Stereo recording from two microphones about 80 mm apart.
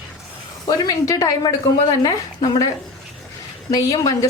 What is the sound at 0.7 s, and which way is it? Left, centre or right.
A woman's voice, left.